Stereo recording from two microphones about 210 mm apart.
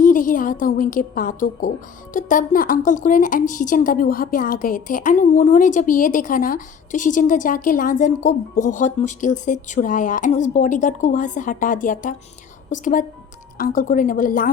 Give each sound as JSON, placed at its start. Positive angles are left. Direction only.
{"t": 0.0, "sound": "a woman's voice", "side_deg": 40}